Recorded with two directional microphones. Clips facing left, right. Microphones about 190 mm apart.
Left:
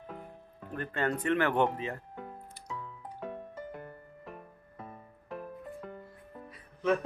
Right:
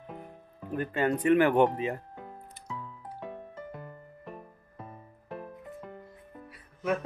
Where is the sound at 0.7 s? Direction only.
10° right (ahead or behind).